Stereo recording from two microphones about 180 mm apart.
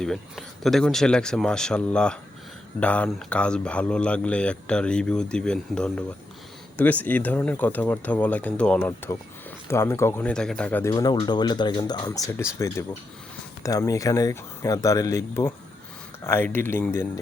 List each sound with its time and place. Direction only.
0.0 s speech: centre (ahead or behind)
10.9 s speech: 25° left (ahead or behind)